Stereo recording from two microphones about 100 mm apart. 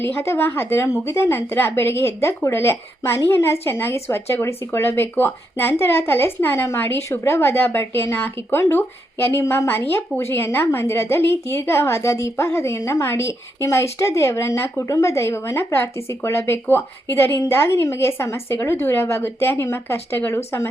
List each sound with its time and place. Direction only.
0.0 s speech: 25° left (ahead or behind)